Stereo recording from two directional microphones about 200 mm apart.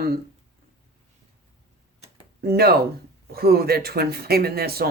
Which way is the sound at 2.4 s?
50° right (ahead or behind).